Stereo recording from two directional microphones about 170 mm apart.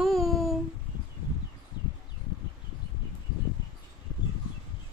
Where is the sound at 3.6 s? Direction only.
25° left (ahead or behind).